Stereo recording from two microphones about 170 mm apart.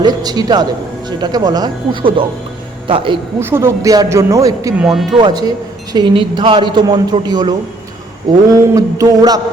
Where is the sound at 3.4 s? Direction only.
15° right (ahead or behind).